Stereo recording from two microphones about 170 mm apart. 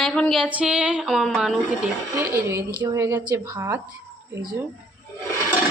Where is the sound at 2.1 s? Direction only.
15° right (ahead or behind).